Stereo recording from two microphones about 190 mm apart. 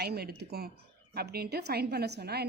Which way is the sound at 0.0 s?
55° right (ahead or behind).